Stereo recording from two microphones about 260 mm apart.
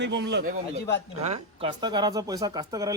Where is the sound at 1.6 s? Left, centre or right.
Centre.